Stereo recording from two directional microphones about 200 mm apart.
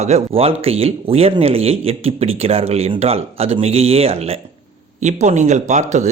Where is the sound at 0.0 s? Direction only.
35° right (ahead or behind).